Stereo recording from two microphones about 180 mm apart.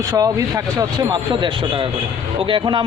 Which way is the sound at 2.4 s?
25° right (ahead or behind).